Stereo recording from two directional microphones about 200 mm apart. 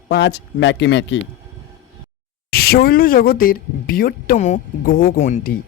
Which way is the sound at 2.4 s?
50° left (ahead or behind).